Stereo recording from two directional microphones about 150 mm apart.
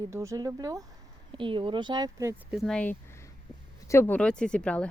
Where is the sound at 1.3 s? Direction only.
35° right (ahead or behind).